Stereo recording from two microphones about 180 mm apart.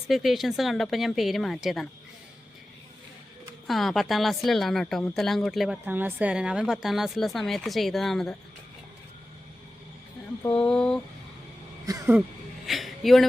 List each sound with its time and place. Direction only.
0.1 s speech: centre (ahead or behind)
3.7 s speech: centre (ahead or behind)
10.4 s speech: 5° left (ahead or behind)
11.9 s speech: 20° right (ahead or behind)
12.6 s a sound: centre (ahead or behind)